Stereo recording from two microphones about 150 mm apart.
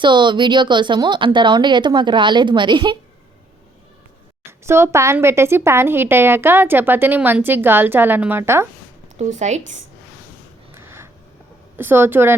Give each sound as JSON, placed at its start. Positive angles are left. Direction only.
{"t": 0.0, "sound": "a woman's voice", "side_deg": -30}
{"t": 4.6, "sound": "a woman's voice", "side_deg": -15}
{"t": 9.1, "sound": "speech", "side_deg": -55}
{"t": 10.8, "sound": "a sound", "side_deg": -15}
{"t": 11.8, "sound": "a woman's voice", "side_deg": -15}